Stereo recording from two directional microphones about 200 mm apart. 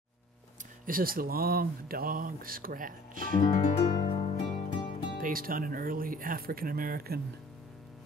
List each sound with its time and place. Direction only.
0.8 s speech: 45° right (ahead or behind)
3.5 s music: 30° left (ahead or behind)
5.2 s speech: 45° right (ahead or behind)